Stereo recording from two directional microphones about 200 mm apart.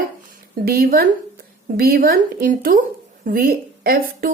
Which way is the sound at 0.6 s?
50° right (ahead or behind).